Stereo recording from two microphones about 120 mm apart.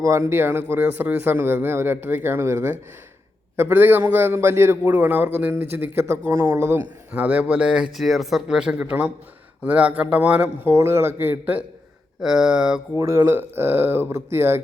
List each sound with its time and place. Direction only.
0.0 s a man's voice: 25° right (ahead or behind); by 12.8 s 5° right (ahead or behind)
13.0 s a man's voice: 20° right (ahead or behind)